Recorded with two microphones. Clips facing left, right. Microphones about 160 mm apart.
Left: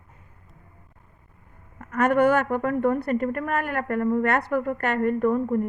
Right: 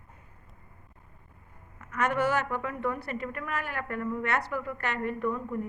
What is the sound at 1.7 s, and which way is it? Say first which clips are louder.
A woman's voice: left 8 dB; 50° left (ahead or behind).